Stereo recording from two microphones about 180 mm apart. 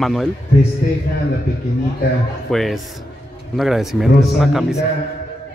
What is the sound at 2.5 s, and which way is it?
A man's voice, centre (ahead or behind).